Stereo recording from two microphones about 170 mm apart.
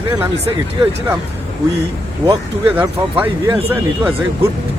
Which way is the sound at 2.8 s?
10° right (ahead or behind).